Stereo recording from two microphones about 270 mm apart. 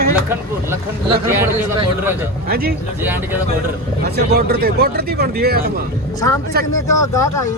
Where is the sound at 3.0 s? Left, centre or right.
Centre.